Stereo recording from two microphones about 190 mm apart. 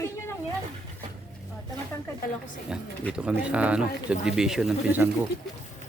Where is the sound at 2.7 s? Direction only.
5° right (ahead or behind).